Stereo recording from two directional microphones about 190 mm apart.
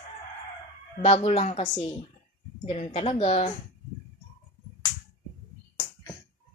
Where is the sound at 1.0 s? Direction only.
35° left (ahead or behind).